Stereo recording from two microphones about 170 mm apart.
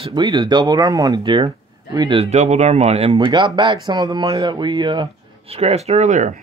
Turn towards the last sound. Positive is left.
turn(degrees=-45)  # may be behind; listen again after turning